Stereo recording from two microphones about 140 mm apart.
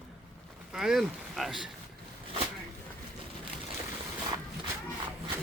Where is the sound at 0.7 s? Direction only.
5° right (ahead or behind).